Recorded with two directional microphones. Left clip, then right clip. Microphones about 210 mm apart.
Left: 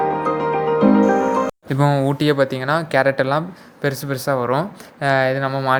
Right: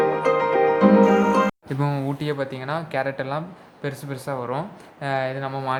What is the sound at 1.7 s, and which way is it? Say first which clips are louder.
Speech: left 8 dB; 25° left (ahead or behind).